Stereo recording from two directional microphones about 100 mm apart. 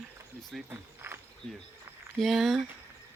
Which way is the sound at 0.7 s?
25° right (ahead or behind).